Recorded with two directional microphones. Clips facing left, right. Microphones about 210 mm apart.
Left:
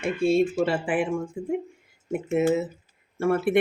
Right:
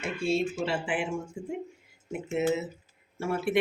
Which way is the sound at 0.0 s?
50° left (ahead or behind).